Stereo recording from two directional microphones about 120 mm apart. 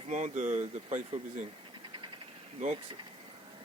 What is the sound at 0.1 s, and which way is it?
Speech, 80° right.